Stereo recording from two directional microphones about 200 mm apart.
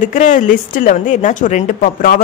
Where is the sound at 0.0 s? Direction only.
40° left (ahead or behind).